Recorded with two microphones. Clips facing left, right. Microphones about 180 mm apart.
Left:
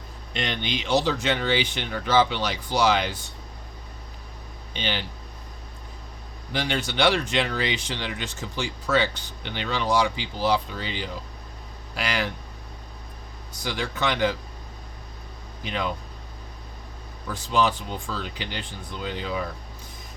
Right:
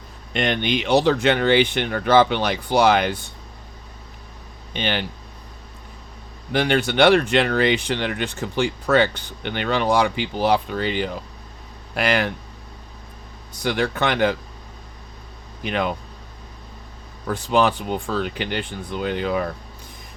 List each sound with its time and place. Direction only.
0.3 s speech: 55° right (ahead or behind)
4.7 s speech: 55° right (ahead or behind)
6.5 s speech: 55° right (ahead or behind)
13.6 s speech: 60° right (ahead or behind)
15.6 s speech: 60° right (ahead or behind)
17.2 s speech: 60° right (ahead or behind)